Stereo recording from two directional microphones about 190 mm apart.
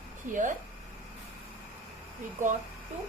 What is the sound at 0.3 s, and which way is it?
Speech, 45° right (ahead or behind).